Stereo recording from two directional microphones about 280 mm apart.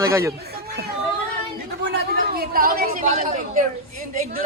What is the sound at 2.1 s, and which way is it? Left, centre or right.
A man's voice, right.